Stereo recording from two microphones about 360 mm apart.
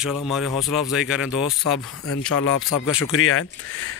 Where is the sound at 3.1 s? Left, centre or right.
Left.